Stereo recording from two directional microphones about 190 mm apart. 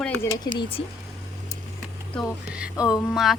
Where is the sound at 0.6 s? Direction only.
30° left (ahead or behind).